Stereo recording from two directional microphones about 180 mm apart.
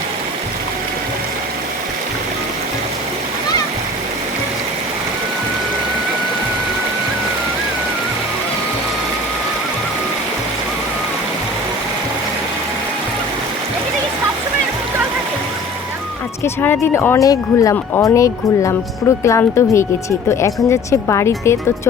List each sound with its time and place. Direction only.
16.4 s speech: 10° left (ahead or behind)